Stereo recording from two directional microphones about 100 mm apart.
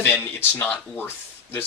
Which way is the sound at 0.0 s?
20° left (ahead or behind).